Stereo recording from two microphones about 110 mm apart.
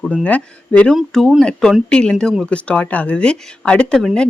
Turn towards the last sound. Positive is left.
turn(degrees=5)  # may be behind; listen again after turning